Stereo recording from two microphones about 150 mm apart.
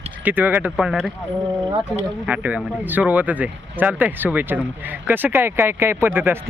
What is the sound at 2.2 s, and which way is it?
Speech, 10° right (ahead or behind).